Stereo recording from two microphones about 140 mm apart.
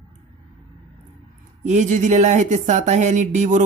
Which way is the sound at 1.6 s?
60° right (ahead or behind).